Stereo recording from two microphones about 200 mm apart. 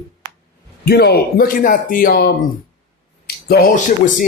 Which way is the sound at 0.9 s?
50° left (ahead or behind).